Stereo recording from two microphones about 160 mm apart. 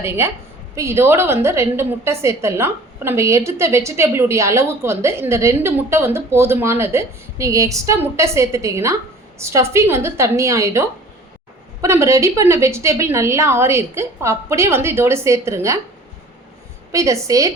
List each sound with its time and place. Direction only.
0.2 s a woman's voice: 15° right (ahead or behind)
16.9 s a woman's voice: 20° right (ahead or behind)